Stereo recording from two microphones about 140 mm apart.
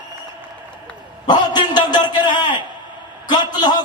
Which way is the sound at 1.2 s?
30° left (ahead or behind).